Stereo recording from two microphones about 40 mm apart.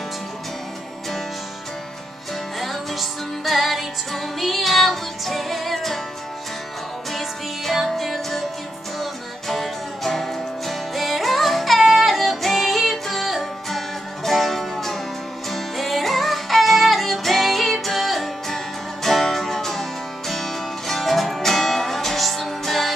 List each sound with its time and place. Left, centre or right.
2.6 s music: centre
7.1 s music: centre